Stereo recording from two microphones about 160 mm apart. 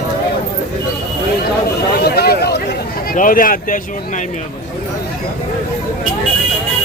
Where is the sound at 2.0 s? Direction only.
80° left.